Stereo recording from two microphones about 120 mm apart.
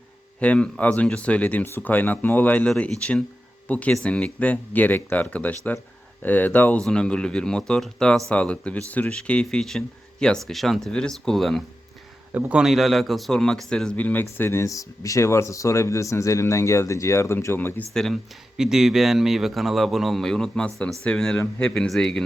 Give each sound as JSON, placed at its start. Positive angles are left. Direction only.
{"t": 0.3, "sound": "speech", "side_deg": 10}
{"t": 12.3, "sound": "a man's voice", "side_deg": -10}
{"t": 17.9, "sound": "speech", "side_deg": 0}